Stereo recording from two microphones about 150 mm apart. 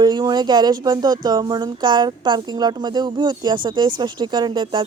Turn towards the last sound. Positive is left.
turn(degrees=-30)  # may be behind; listen again after turning